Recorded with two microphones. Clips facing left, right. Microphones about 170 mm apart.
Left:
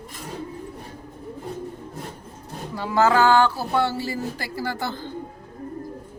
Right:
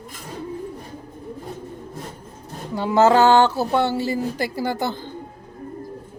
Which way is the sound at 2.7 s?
25° right (ahead or behind).